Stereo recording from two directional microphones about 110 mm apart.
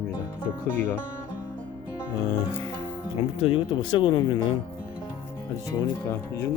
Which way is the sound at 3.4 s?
55° left (ahead or behind).